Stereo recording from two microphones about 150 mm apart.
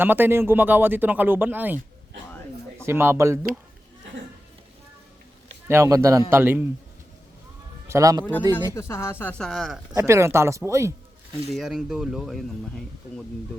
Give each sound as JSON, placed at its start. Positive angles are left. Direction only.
{"t": 0.0, "sound": "speech", "side_deg": -15}
{"t": 2.8, "sound": "speech", "side_deg": -15}
{"t": 5.6, "sound": "speech", "side_deg": -20}
{"t": 7.9, "sound": "speech", "side_deg": -20}
{"t": 8.2, "sound": "speech", "side_deg": 10}
{"t": 9.4, "sound": "speech", "side_deg": 0}
{"t": 9.9, "sound": "speech", "side_deg": -20}
{"t": 11.5, "sound": "speech", "side_deg": -5}